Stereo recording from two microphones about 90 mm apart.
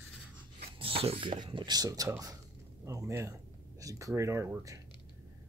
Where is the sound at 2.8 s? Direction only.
30° right (ahead or behind).